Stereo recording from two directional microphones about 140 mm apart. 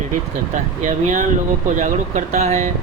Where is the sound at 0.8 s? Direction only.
65° right (ahead or behind).